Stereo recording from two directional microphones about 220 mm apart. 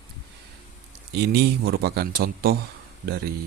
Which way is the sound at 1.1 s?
50° right (ahead or behind).